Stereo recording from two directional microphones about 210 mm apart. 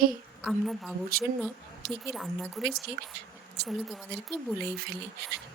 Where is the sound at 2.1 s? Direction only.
Centre (ahead or behind).